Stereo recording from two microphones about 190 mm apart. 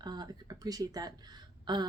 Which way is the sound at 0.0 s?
20° right (ahead or behind).